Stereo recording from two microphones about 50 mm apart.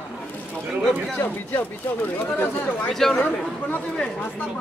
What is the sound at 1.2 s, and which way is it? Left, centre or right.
Speech, left.